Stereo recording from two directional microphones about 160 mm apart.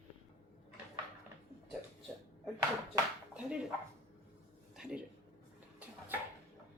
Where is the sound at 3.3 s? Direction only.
5° right (ahead or behind).